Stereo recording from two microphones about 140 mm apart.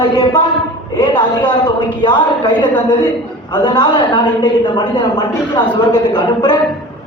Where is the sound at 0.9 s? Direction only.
30° left (ahead or behind).